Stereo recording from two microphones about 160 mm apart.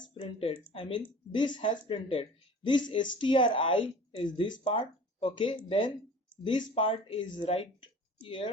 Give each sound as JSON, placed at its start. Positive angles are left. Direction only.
{"t": 0.1, "sound": "speech", "side_deg": 35}